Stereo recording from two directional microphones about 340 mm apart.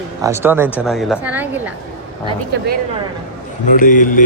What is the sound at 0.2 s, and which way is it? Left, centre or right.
Speech, centre.